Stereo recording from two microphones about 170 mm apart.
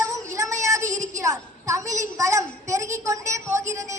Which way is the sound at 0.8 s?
45° right (ahead or behind).